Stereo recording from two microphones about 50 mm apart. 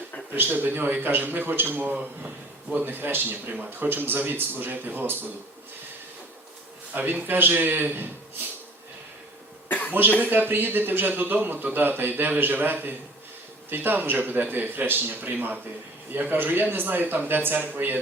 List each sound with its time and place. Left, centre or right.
0.3 s a man's voice: right
2.7 s speech: right
6.9 s speech: right
9.6 s cough: left
10.2 s a man's voice: right